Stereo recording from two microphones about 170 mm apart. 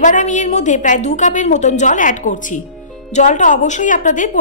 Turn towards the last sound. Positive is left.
turn(degrees=50)  # may be behind; listen again after turning